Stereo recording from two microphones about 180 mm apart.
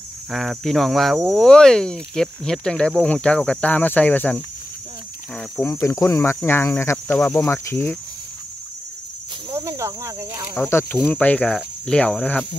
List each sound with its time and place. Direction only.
0.3 s speech: centre (ahead or behind)
5.6 s cricket: 15° left (ahead or behind)
9.5 s speech: 15° right (ahead or behind)
10.5 s cricket: 15° left (ahead or behind)